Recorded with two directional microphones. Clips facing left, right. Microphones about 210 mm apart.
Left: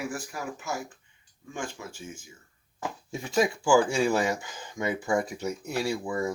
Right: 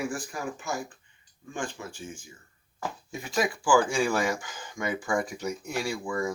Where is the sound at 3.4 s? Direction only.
25° left (ahead or behind).